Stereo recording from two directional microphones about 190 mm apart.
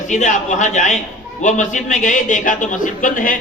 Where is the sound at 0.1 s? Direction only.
40° left (ahead or behind).